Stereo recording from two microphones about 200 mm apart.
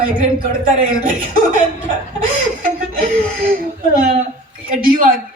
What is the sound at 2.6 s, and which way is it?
Laughter, 45° right (ahead or behind).